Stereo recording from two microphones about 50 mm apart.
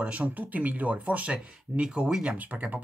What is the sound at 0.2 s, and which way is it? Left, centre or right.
Speech, right.